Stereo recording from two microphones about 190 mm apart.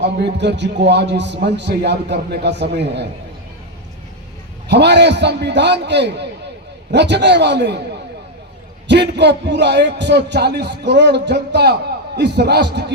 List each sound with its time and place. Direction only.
0.0 s a man's voice: 65° right (ahead or behind)
4.7 s a man's voice: 65° right (ahead or behind)
8.9 s a man's voice: 65° right (ahead or behind)